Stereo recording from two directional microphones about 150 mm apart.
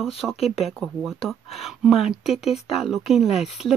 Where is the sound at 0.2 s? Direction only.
Centre (ahead or behind).